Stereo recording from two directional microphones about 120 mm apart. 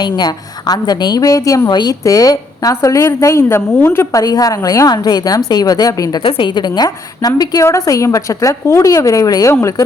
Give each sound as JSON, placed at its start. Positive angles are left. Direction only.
{"t": 0.0, "sound": "a woman's voice", "side_deg": 35}
{"t": 4.2, "sound": "a woman's voice", "side_deg": 30}